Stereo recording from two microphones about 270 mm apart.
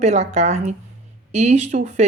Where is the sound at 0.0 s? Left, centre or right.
Right.